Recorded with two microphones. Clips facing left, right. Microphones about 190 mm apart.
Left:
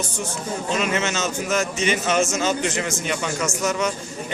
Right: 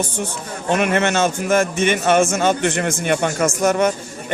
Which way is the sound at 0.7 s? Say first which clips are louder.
Right 7 dB; 60° right (ahead or behind).